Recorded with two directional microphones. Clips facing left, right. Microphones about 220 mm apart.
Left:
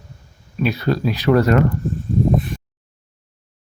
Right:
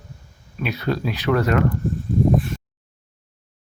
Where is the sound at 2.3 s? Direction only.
20° left (ahead or behind).